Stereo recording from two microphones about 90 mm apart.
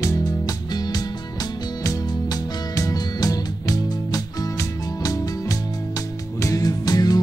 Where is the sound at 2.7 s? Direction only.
45° left (ahead or behind).